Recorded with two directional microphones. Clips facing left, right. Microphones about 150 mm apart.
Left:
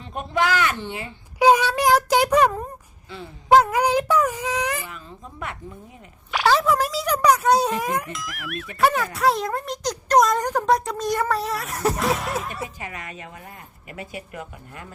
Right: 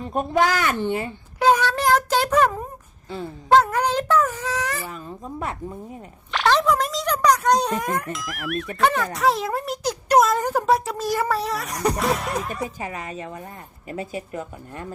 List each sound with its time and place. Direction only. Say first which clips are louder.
0.0 s a woman's voice: right 3 dB; 45° right (ahead or behind)
1.4 s child singing: left 2 dB; 10° left (ahead or behind)
3.5 s speech: left 1 dB; 10° left (ahead or behind)
6.3 s a child's voice: even; 5° left (ahead or behind)
12.6 s speech: right 4 dB; 35° right (ahead or behind)